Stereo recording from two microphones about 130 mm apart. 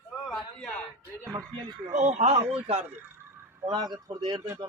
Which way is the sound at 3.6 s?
35° right (ahead or behind).